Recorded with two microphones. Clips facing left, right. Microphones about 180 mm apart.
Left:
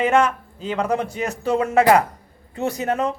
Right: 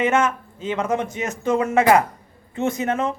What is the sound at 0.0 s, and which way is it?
A man's voice, 35° left (ahead or behind).